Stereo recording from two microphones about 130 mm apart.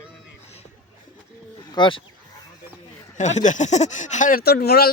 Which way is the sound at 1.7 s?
40° left (ahead or behind).